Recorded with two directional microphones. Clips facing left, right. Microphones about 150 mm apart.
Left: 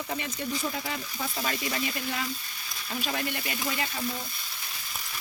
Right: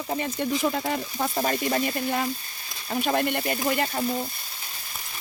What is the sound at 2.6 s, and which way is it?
Frying, 30° right (ahead or behind).